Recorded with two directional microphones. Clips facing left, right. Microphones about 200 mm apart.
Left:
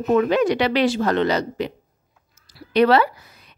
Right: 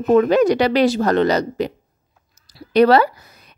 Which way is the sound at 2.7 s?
40° right (ahead or behind).